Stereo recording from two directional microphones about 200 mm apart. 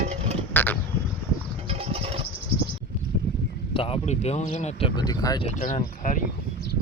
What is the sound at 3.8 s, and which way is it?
Speech, 30° left (ahead or behind).